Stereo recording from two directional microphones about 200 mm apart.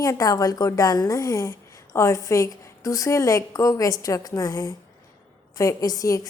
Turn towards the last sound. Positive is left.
turn(degrees=15)  # may be behind; listen again after turning